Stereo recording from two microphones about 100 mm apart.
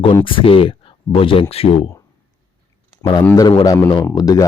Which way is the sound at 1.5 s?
80° left.